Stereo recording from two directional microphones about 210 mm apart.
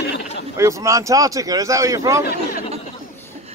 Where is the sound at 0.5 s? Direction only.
15° right (ahead or behind).